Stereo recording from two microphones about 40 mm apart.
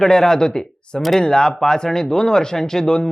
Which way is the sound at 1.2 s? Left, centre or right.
Centre.